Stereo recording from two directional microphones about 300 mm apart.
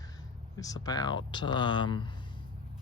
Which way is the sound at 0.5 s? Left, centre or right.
Centre.